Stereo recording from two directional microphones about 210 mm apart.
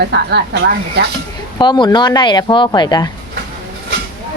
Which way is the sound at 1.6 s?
20° left (ahead or behind).